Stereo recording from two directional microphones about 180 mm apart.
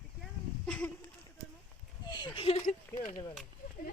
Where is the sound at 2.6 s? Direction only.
45° left (ahead or behind).